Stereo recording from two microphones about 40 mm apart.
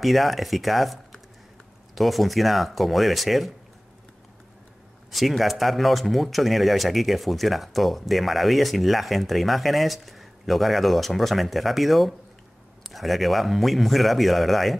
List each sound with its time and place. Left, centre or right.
0.0 s speech: centre
5.4 s speech: centre